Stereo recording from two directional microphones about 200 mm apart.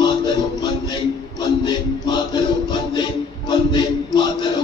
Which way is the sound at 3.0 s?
20° left (ahead or behind).